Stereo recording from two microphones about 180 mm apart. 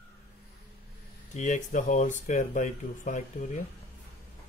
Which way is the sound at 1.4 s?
40° left (ahead or behind).